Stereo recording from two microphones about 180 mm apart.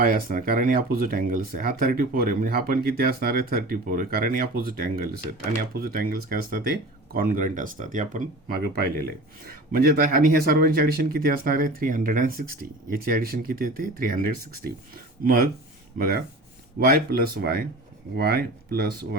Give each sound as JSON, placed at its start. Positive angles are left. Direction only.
{"t": 0.0, "sound": "speech", "side_deg": -55}
{"t": 16.0, "sound": "speech", "side_deg": -50}